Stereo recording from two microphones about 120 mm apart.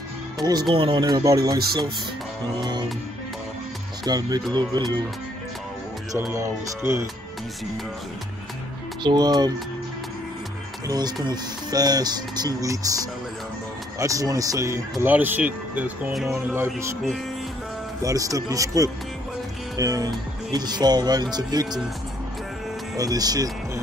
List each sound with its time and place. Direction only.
0.4 s speech: 35° right (ahead or behind)
0.7 s speech: 45° right (ahead or behind)
4.0 s speech: 35° right (ahead or behind)
6.3 s speech: 25° right (ahead or behind)
9.0 s speech: 35° right (ahead or behind)
10.9 s speech: 35° right (ahead or behind); by 16.9 s 15° right (ahead or behind)
18.0 s speech: 30° right (ahead or behind)
22.9 s speech: 30° right (ahead or behind)